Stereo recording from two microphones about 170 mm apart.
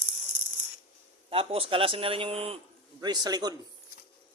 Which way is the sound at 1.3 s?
35° right (ahead or behind).